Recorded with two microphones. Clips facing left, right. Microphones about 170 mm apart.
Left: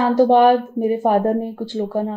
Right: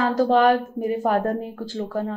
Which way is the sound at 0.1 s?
25° left (ahead or behind).